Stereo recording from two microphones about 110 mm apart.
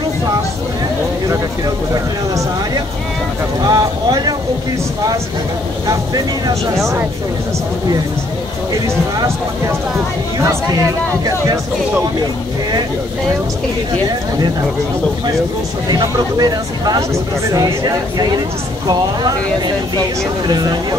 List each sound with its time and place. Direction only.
3.6 s speech: 35° right (ahead or behind)
5.9 s speech: 35° right (ahead or behind)
10.4 s speech: 30° right (ahead or behind)
15.9 s speech: 35° right (ahead or behind)